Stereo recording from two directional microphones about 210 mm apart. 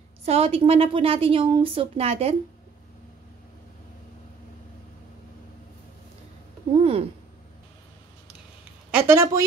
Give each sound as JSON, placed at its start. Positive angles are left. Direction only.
{"t": 0.2, "sound": "a woman's voice", "side_deg": -30}
{"t": 6.8, "sound": "a sound", "side_deg": -30}
{"t": 8.9, "sound": "a woman's voice", "side_deg": -10}